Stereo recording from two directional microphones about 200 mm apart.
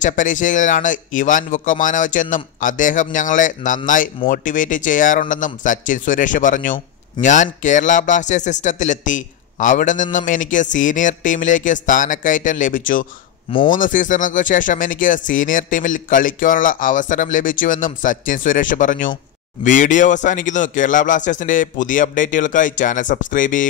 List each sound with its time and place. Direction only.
0.0 s speech: 40° left (ahead or behind)